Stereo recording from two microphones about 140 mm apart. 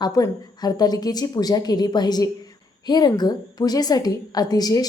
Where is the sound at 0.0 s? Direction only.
30° left (ahead or behind).